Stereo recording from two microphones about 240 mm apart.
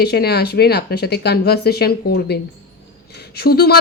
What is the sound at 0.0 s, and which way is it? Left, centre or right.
Speech, left.